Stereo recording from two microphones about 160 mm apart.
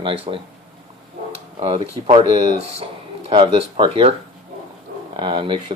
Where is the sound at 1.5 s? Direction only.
35° right (ahead or behind).